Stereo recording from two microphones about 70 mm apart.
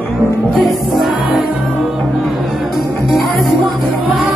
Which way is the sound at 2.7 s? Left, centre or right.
Centre.